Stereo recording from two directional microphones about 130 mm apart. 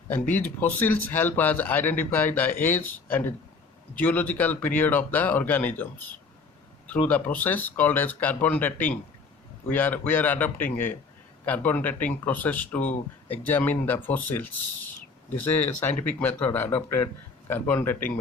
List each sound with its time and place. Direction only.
0.1 s speech: 15° left (ahead or behind)